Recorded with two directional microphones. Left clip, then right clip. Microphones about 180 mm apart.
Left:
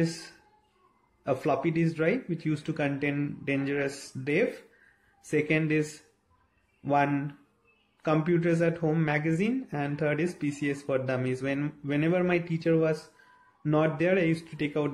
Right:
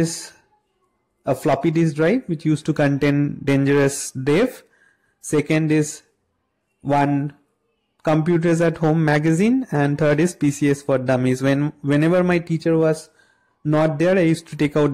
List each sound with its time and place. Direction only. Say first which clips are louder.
1.2 s speech: right 8 dB; 45° right (ahead or behind)